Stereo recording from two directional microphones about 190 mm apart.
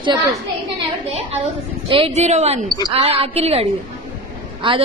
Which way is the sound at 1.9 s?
30° right (ahead or behind).